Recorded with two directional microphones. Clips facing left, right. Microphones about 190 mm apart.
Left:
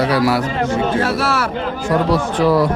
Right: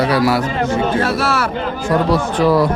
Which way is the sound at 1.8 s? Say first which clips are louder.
Right 1 dB; 45° right (ahead or behind).